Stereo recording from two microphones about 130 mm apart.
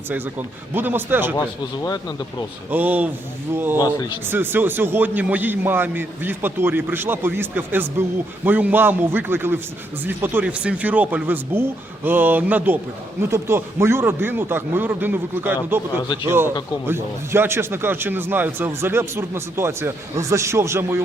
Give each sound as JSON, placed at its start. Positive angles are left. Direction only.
{"t": 0.1, "sound": "speech", "side_deg": -15}
{"t": 1.4, "sound": "speech", "side_deg": 30}
{"t": 2.6, "sound": "speech", "side_deg": -15}
{"t": 3.8, "sound": "speech", "side_deg": 35}
{"t": 4.3, "sound": "speech", "side_deg": -15}
{"t": 16.8, "sound": "speech", "side_deg": -15}